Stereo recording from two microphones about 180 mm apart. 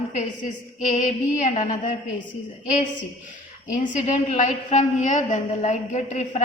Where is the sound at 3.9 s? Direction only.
40° left (ahead or behind).